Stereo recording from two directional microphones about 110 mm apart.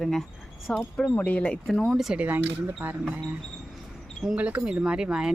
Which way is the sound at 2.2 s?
15° right (ahead or behind).